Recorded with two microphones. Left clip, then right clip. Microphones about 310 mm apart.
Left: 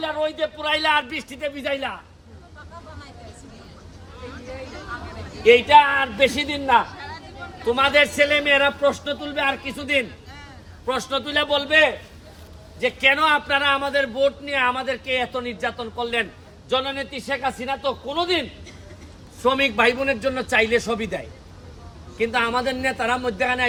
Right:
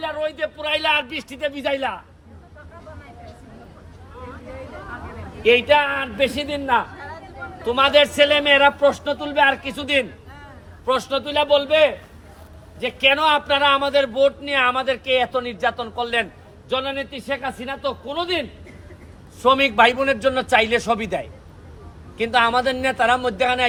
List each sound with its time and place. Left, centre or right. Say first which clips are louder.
0.0 s a man's voice: left 1 dB; centre
5.6 s a man's voice: left 3 dB; centre